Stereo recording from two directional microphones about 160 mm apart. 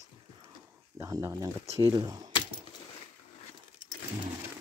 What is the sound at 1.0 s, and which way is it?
Speech, 20° right (ahead or behind).